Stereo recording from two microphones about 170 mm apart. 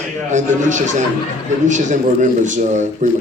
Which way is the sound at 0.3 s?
45° right (ahead or behind).